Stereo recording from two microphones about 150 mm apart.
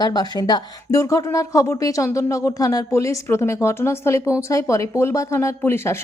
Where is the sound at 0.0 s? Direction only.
25° left (ahead or behind).